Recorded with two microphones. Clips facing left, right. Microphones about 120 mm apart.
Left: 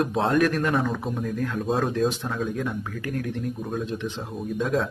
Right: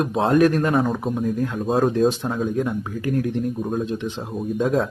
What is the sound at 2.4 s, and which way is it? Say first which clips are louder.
Speech: right 5 dB; 30° right (ahead or behind).